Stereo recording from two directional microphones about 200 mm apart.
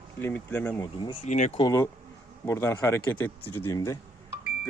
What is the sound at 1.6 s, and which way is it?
Speech, 15° left (ahead or behind).